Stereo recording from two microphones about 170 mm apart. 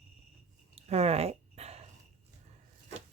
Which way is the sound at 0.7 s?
35° right (ahead or behind).